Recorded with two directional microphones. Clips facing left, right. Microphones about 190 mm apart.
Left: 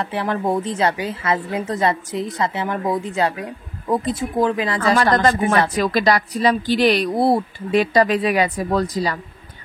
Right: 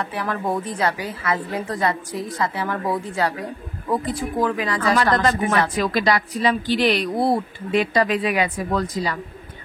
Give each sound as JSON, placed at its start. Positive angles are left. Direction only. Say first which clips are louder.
{"t": 0.0, "sound": "a woman's voice", "louder": "left 3 dB", "side_deg": 25}
{"t": 4.9, "sound": "a woman's voice", "louder": "left 3 dB", "side_deg": 40}